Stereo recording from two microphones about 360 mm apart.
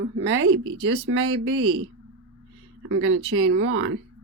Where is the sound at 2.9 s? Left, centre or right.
Right.